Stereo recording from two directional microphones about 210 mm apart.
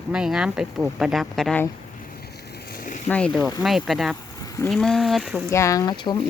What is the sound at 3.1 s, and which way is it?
Speech, 5° left (ahead or behind).